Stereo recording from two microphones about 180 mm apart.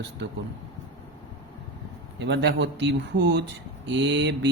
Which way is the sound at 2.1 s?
75° right (ahead or behind).